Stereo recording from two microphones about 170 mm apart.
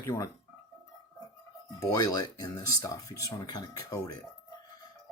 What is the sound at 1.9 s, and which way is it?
Speech, 20° left (ahead or behind).